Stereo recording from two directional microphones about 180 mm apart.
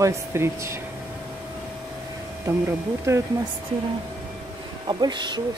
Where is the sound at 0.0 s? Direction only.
15° right (ahead or behind).